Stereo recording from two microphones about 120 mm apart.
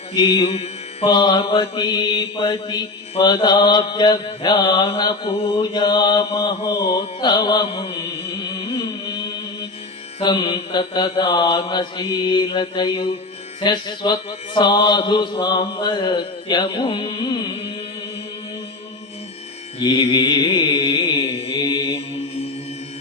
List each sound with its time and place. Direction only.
0.1 s mantra: 40° left (ahead or behind)
0.4 s mantra: 60° left (ahead or behind)
1.0 s mantra: 40° left (ahead or behind)
10.2 s mantra: 40° left (ahead or behind)
19.8 s mantra: 50° left (ahead or behind)
21.2 s mantra: 60° left (ahead or behind)
21.5 s mantra: 35° left (ahead or behind)
21.8 s mantra: 55° left (ahead or behind)